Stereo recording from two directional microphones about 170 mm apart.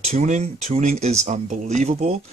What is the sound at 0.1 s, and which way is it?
Speech, 40° right (ahead or behind).